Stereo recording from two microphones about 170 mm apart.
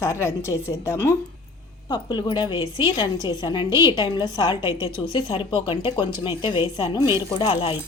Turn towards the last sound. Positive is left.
turn(degrees=30)  # may be behind; listen again after turning